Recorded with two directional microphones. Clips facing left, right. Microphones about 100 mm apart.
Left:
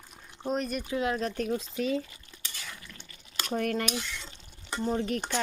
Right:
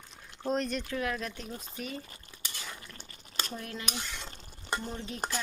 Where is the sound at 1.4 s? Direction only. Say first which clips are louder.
Left 11 dB; 90° left.